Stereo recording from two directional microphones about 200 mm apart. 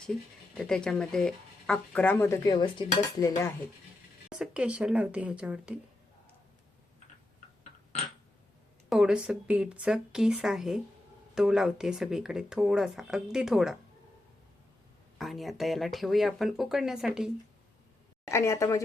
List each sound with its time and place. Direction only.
0.0 s speech: centre (ahead or behind)
4.3 s speech: 5° right (ahead or behind)
8.9 s speech: 5° right (ahead or behind)
15.2 s speech: centre (ahead or behind)
18.3 s speech: 15° left (ahead or behind)